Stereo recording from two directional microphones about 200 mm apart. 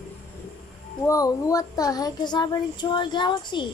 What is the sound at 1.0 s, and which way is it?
Speech, 15° left (ahead or behind).